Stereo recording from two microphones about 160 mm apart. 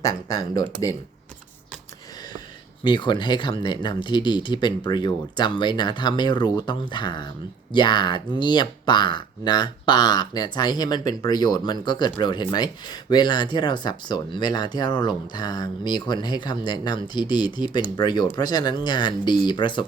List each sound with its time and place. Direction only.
0.0 s speech: 20° left (ahead or behind)
2.8 s speech: 30° left (ahead or behind)